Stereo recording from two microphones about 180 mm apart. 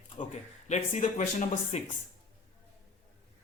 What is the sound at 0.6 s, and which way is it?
A man's voice, 40° left (ahead or behind).